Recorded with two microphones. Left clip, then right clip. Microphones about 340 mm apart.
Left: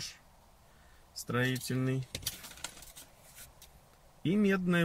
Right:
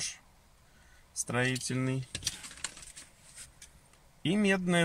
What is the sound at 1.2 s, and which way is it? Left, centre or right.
Speech, centre.